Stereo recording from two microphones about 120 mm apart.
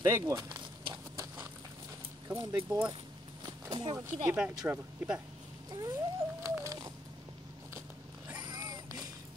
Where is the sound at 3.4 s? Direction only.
35° right (ahead or behind).